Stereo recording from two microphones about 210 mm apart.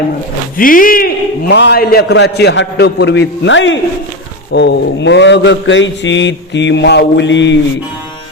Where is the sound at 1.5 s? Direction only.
55° left (ahead or behind).